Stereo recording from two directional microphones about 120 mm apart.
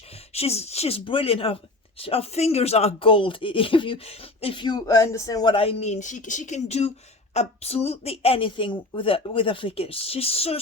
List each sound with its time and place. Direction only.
0.3 s a woman's voice: 60° left (ahead or behind)
4.6 s speech: 35° left (ahead or behind)
5.5 s a woman's voice: 60° left (ahead or behind)